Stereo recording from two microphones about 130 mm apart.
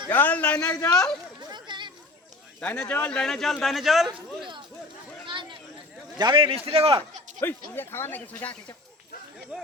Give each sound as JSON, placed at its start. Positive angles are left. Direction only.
{"t": 0.1, "sound": "speech", "side_deg": 15}
{"t": 0.7, "sound": "a woman's voice", "side_deg": 25}
{"t": 1.4, "sound": "a sound", "side_deg": -35}
{"t": 2.6, "sound": "speech", "side_deg": 10}
{"t": 5.2, "sound": "a sound", "side_deg": -40}
{"t": 6.1, "sound": "speech", "side_deg": -35}
{"t": 7.3, "sound": "speech", "side_deg": 15}